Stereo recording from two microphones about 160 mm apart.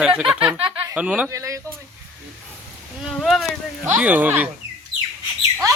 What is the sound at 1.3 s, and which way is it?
Speech, 20° right (ahead or behind).